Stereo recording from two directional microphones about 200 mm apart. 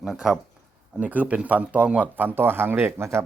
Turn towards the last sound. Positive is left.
turn(degrees=-15)  # may be behind; listen again after turning